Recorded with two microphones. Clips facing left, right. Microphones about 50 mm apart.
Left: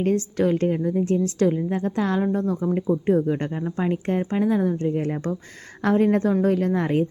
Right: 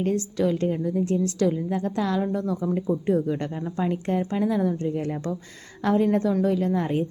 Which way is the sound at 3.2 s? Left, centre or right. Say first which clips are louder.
Left 3 dB; left.